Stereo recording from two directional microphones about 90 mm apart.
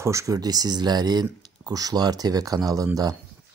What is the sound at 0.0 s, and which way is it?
Speech, 35° right (ahead or behind).